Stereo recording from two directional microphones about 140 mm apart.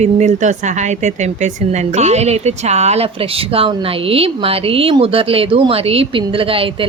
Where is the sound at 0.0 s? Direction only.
55° right (ahead or behind).